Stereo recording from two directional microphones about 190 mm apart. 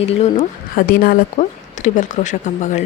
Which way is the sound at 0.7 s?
50° left (ahead or behind).